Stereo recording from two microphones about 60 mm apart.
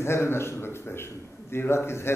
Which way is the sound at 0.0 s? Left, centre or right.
Left.